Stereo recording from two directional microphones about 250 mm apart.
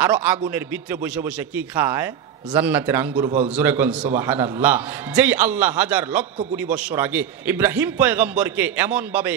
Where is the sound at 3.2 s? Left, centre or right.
Right.